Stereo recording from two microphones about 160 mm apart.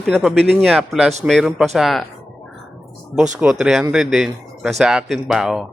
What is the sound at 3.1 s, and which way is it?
Speech, 5° right (ahead or behind).